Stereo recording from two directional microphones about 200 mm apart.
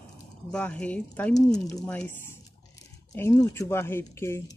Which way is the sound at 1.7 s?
5° left (ahead or behind).